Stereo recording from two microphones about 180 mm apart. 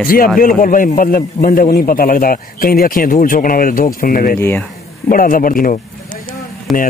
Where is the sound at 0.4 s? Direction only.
50° left (ahead or behind).